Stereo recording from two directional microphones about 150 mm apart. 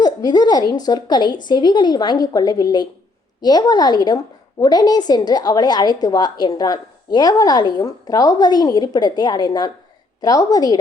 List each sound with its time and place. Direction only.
0.0 s a woman's voice: 25° left (ahead or behind)